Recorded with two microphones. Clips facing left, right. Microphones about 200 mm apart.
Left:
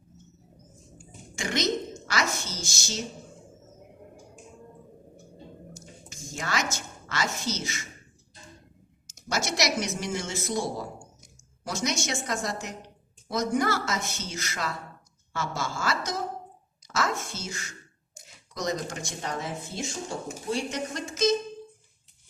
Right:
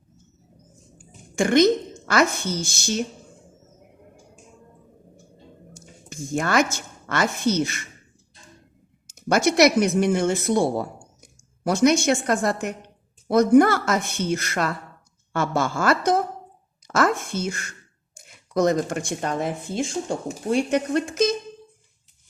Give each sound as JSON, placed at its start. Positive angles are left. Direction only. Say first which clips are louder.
{"t": 1.4, "sound": "speech", "louder": "right 11 dB", "side_deg": -55}
{"t": 5.7, "sound": "a woman's voice", "louder": "right 6 dB", "side_deg": -55}
{"t": 9.0, "sound": "speech", "louder": "right 11 dB", "side_deg": -55}